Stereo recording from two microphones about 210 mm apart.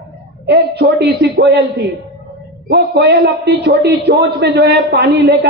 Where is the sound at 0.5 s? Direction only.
50° right (ahead or behind).